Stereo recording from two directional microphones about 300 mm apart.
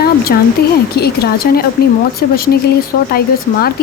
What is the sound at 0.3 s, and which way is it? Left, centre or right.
A woman's voice, left.